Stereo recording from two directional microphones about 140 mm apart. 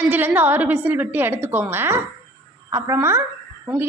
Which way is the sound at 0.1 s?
10° right (ahead or behind).